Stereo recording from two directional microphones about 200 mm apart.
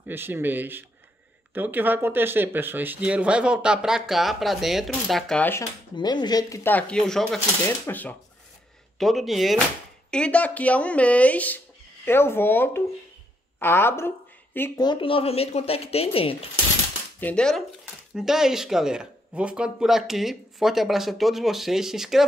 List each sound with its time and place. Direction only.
0.0 s speech: 10° right (ahead or behind); by 5.7 s 10° left (ahead or behind)
5.9 s speech: 20° left (ahead or behind)
14.9 s a woman's voice: 25° left (ahead or behind)
17.2 s speech: 5° left (ahead or behind)